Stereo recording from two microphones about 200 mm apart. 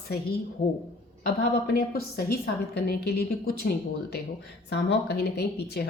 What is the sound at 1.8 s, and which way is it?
Speech, 50° left (ahead or behind).